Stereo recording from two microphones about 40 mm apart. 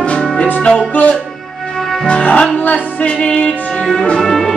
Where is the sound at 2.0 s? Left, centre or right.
Left.